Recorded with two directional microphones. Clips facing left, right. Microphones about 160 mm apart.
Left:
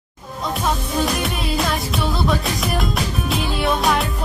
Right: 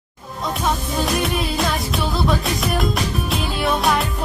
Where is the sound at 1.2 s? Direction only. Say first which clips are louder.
Right 1 dB; centre (ahead or behind).